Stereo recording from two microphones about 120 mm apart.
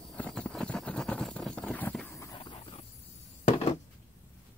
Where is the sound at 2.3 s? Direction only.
45° left (ahead or behind).